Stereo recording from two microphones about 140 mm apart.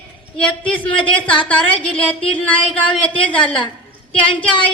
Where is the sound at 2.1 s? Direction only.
40° left (ahead or behind).